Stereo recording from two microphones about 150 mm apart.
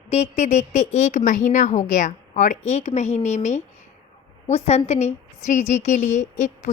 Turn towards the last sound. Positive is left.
turn(degrees=50)  # may be behind; listen again after turning